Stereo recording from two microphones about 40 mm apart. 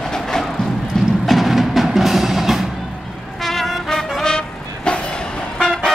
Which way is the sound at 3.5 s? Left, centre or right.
Centre.